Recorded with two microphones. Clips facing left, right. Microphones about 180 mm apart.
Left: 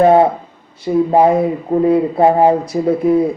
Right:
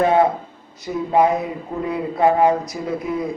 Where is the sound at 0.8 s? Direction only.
30° left (ahead or behind).